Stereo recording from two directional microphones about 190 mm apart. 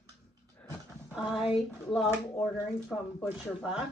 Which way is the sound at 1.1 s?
5° right (ahead or behind).